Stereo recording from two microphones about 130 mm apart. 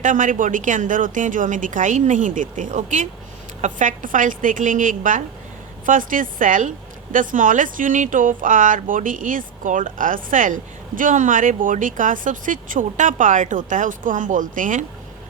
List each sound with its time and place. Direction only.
0.0 s a woman's voice: 80° right